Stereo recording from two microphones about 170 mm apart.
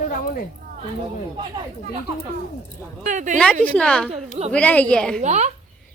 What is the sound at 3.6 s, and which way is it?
Speech, 5° left (ahead or behind).